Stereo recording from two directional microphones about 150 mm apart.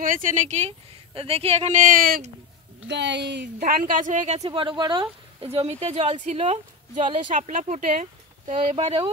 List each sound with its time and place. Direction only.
0.0 s a woman's voice: 65° right (ahead or behind)
3.3 s a woman's voice: 90° right; by 4.5 s 50° right (ahead or behind)
4.5 s a woman's voice: 35° right (ahead or behind); by 8.5 s 55° right (ahead or behind)
8.7 s a woman's voice: 40° right (ahead or behind)